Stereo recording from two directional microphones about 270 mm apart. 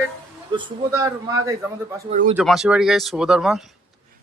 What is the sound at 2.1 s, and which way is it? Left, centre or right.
Speech, right.